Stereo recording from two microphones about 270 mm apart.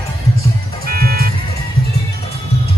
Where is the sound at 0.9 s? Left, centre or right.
Right.